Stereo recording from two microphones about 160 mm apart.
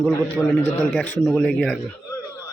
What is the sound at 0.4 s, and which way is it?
A man's voice, 10° left (ahead or behind).